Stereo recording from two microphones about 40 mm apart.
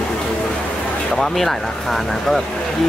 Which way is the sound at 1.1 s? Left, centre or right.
Centre.